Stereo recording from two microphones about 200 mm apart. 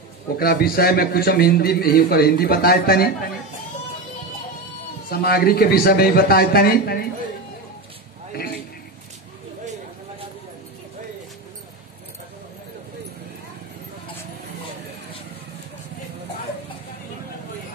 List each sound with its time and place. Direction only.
0.4 s a man's voice: 50° left (ahead or behind)
5.1 s a man's voice: 50° left (ahead or behind)